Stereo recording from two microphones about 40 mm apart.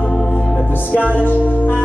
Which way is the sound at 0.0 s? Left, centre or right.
Left.